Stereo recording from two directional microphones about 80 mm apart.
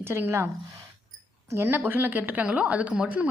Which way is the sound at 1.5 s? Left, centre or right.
Right.